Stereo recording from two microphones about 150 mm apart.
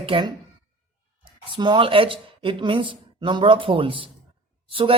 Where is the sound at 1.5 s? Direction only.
30° right (ahead or behind).